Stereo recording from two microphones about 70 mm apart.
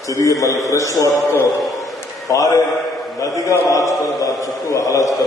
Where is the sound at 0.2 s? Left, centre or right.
Left.